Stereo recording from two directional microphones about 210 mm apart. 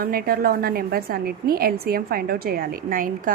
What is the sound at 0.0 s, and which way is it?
A woman's voice, 45° right (ahead or behind).